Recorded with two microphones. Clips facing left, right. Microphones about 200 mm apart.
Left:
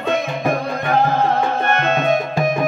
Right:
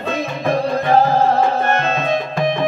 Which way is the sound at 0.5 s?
30° right (ahead or behind).